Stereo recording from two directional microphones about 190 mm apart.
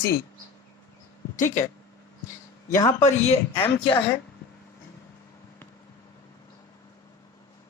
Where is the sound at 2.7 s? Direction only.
15° left (ahead or behind).